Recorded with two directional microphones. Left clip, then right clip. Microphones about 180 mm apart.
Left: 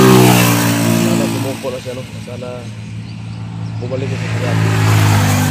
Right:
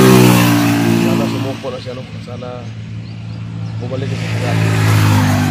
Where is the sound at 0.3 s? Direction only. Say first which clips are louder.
Even; 70° left (ahead or behind).